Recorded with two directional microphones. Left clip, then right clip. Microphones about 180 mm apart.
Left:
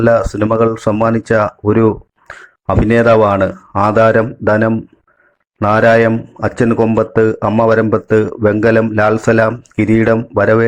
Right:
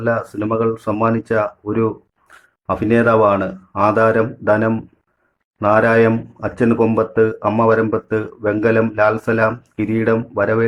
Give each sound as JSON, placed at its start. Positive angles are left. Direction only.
{"t": 0.0, "sound": "speech", "side_deg": 35}